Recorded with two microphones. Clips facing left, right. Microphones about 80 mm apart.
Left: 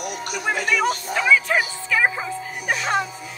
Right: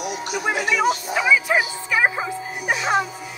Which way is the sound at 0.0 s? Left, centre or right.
Left.